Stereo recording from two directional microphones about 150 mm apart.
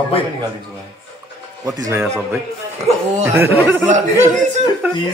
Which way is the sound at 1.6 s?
20° right (ahead or behind).